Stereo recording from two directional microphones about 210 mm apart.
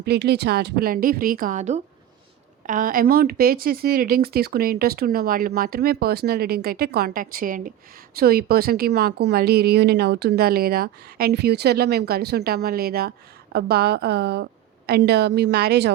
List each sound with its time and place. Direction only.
0.0 s speech: 50° right (ahead or behind)